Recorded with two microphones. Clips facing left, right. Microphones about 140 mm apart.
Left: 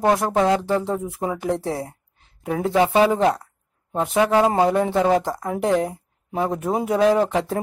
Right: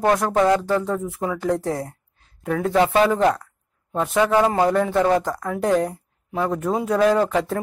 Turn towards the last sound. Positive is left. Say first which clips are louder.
# even
turn(degrees=20)  # may be behind; listen again after turning